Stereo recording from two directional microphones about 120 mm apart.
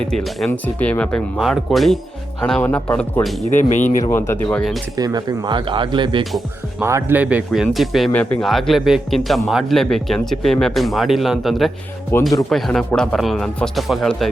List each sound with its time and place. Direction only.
0.0 s speech: 5° left (ahead or behind)
1.4 s speech: centre (ahead or behind)
2.6 s speech: 10° left (ahead or behind)
3.5 s speech: 90° left
4.1 s speech: 20° left (ahead or behind)
4.5 s speech: centre (ahead or behind)
4.9 s speech: 30° right (ahead or behind)
6.7 s speech: 20° right (ahead or behind); by 8.1 s centre (ahead or behind)
8.1 s speech: 10° left (ahead or behind)
8.4 s speech: centre (ahead or behind)
12.1 s speech: 20° left (ahead or behind)
12.5 s speech: 5° left (ahead or behind)